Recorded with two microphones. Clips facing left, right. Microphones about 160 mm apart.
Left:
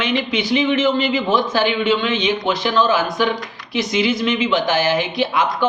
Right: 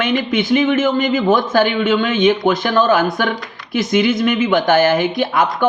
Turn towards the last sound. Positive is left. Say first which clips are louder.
# right 2 dB
turn(degrees=-50)  # may be behind; listen again after turning